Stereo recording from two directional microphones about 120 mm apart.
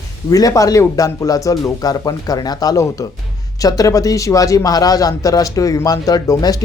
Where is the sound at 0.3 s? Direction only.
30° left (ahead or behind).